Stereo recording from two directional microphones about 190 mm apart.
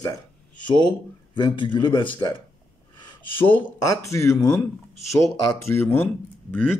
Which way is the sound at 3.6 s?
15° left (ahead or behind).